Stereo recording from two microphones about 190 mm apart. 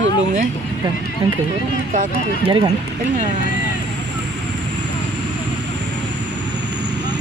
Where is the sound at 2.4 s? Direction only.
30° right (ahead or behind).